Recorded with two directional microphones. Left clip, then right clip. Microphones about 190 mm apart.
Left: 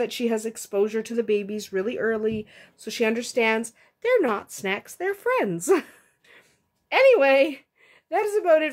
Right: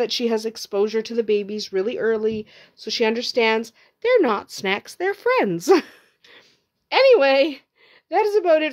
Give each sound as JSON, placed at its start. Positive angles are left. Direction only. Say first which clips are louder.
{"t": 0.0, "sound": "a woman's voice", "louder": "right 4 dB", "side_deg": -40}